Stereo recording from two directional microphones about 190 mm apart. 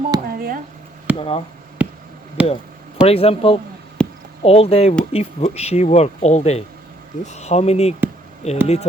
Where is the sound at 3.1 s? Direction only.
30° left (ahead or behind).